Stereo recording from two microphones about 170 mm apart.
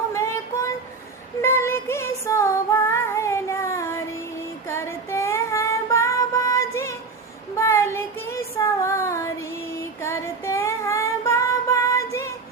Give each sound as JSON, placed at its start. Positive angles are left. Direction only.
{"t": 0.1, "sound": "child singing", "side_deg": 15}
{"t": 1.4, "sound": "female singing", "side_deg": 15}
{"t": 7.5, "sound": "child singing", "side_deg": 15}
{"t": 9.7, "sound": "female singing", "side_deg": 15}